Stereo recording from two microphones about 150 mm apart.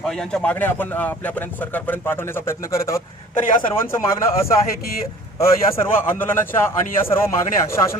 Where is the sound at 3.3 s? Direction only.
60° left (ahead or behind).